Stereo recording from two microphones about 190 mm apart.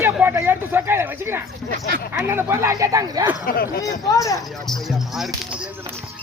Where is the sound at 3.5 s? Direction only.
50° left (ahead or behind).